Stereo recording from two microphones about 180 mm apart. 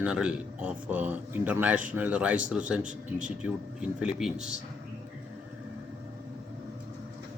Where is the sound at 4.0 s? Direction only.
5° right (ahead or behind).